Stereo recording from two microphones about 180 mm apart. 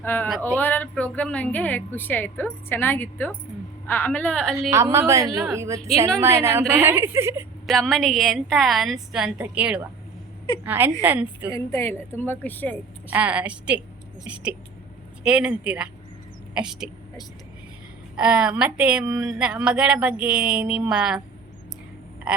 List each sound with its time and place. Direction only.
0.0 s speech: 10° left (ahead or behind)
4.7 s a woman's voice: 15° right (ahead or behind)
5.3 s a woman's voice: centre (ahead or behind)
5.5 s a woman's voice: 15° right (ahead or behind)
7.7 s a woman's voice: centre (ahead or behind)
11.5 s speech: 15° left (ahead or behind)
13.1 s a woman's voice: 10° right (ahead or behind)
15.2 s a woman's voice: 5° right (ahead or behind)
18.2 s a woman's voice: 5° right (ahead or behind)
22.3 s a sound: 5° right (ahead or behind)